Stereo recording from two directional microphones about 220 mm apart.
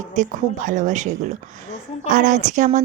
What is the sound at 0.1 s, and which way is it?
Speech, 35° right (ahead or behind).